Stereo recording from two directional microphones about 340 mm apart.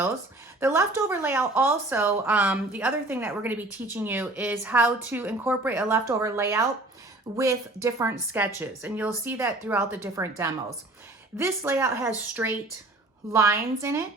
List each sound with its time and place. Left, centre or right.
0.6 s a woman's voice: centre